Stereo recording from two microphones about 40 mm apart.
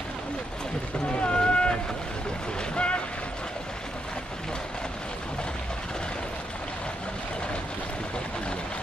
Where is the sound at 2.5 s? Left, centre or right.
Left.